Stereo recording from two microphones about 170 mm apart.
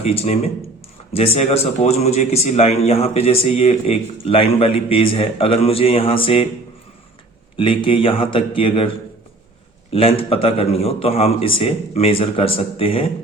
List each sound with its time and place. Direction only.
0.0 s a man's voice: 35° left (ahead or behind)
7.5 s a man's voice: 30° left (ahead or behind)
9.9 s a man's voice: 35° left (ahead or behind)